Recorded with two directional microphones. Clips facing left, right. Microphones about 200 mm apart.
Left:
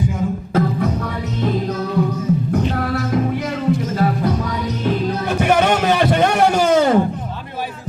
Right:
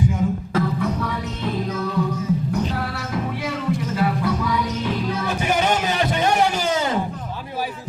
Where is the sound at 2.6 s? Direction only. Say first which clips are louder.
Left 7 dB; 50° left (ahead or behind).